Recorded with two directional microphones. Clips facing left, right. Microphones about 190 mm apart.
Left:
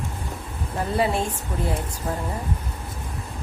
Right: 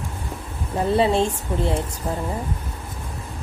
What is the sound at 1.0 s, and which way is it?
Speech, 25° right (ahead or behind).